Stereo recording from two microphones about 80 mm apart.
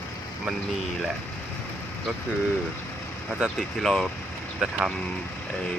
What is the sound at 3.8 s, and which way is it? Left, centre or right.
Speech, centre.